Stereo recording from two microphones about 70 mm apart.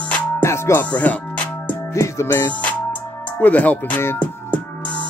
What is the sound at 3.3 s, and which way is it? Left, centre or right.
Speech, left.